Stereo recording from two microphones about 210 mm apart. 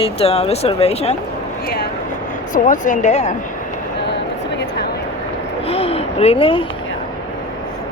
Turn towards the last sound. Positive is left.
turn(degrees=25)  # may be behind; listen again after turning